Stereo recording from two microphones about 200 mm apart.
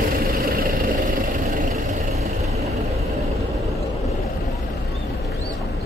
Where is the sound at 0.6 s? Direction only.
45° right (ahead or behind).